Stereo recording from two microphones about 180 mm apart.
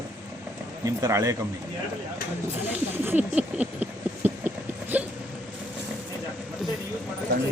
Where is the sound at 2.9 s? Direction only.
10° right (ahead or behind).